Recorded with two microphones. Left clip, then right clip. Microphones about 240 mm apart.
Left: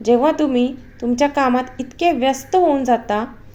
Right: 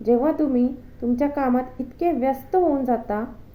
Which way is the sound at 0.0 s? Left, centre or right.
Left.